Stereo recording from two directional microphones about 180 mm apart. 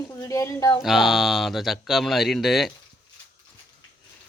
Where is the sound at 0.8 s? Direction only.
Centre (ahead or behind).